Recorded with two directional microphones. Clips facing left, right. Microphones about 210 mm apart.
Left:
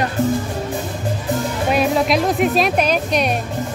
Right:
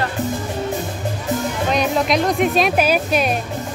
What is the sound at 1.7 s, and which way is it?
Music, 5° left (ahead or behind).